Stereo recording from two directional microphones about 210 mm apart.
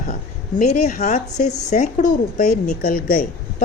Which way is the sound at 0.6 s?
35° left (ahead or behind).